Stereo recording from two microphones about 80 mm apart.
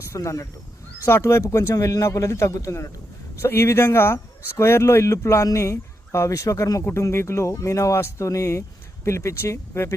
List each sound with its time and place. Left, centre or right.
0.1 s speech: left